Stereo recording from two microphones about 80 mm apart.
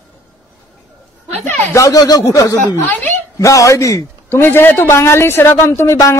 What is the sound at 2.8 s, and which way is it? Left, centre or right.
Speech, left.